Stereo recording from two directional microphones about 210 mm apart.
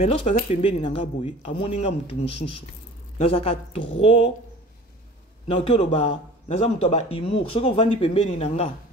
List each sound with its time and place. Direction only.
0.0 s speech: 25° left (ahead or behind)
5.5 s speech: 25° left (ahead or behind)